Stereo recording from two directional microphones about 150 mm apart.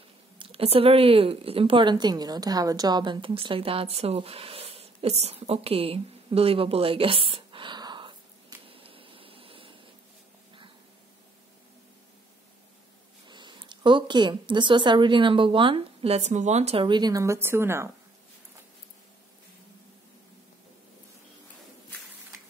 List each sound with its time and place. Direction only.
0.4 s a woman's voice: 40° right (ahead or behind)
13.3 s speech: 30° right (ahead or behind); by 16.8 s 45° right (ahead or behind)
16.8 s a woman's voice: 30° right (ahead or behind)